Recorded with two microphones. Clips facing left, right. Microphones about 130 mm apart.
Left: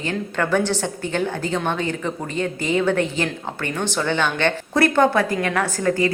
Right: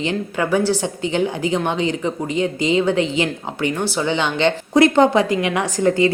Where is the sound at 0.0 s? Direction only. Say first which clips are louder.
Right 2 dB; 15° right (ahead or behind).